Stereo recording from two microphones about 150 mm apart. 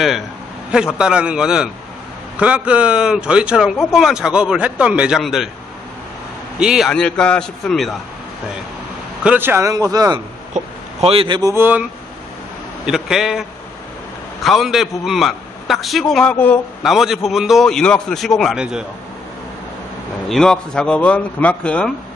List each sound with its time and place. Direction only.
0.9 s a man's voice: 5° right (ahead or behind)
6.6 s a man's voice: 5° right (ahead or behind)
9.2 s a man's voice: 10° right (ahead or behind)
10.5 s speech: 45° right (ahead or behind)
11.5 s speech: 15° right (ahead or behind)
12.8 s a man's voice: 5° right (ahead or behind)
16.8 s a man's voice: centre (ahead or behind)
20.2 s speech: 5° left (ahead or behind)